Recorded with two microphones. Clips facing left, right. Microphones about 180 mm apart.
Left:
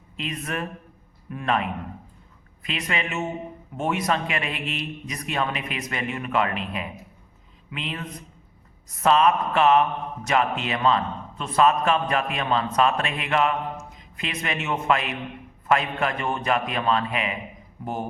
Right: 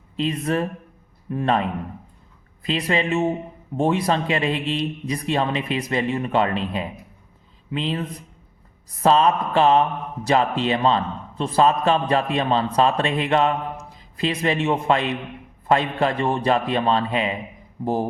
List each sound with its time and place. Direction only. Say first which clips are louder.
0.2 s a man's voice: right 8 dB; 30° right (ahead or behind)
9.0 s a man's voice: right 2 dB; 30° right (ahead or behind)